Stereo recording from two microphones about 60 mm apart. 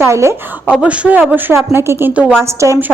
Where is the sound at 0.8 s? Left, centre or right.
Right.